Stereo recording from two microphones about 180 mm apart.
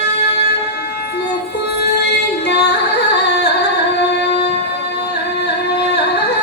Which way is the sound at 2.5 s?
70° left (ahead or behind).